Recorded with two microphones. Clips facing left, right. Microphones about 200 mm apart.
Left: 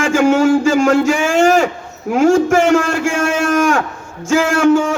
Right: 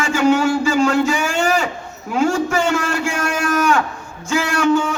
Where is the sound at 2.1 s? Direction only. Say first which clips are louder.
Left 6 dB; 50° left (ahead or behind).